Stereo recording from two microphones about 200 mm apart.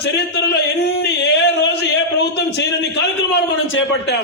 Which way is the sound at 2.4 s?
60° left (ahead or behind).